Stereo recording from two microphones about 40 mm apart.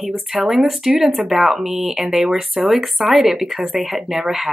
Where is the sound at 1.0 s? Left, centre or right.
Centre.